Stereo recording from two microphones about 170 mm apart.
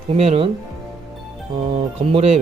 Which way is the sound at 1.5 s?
35° right (ahead or behind).